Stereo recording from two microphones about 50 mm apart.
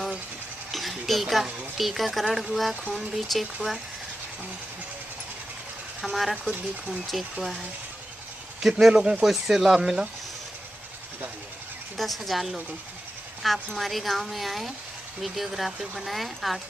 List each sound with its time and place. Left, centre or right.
0.7 s a woman's voice: centre
5.9 s a woman's voice: centre
12.0 s a woman's voice: centre